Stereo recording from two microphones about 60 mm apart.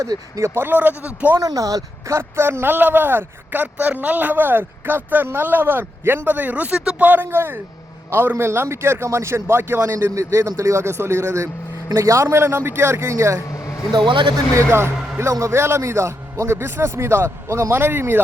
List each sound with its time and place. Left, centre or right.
0.3 s speech: right
1.4 s speech: right
2.1 s a man's voice: right
13.5 s vehicle: left
14.5 s a man's voice: right